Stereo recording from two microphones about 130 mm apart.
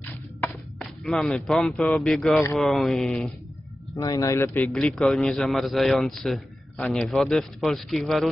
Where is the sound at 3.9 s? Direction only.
25° left (ahead or behind).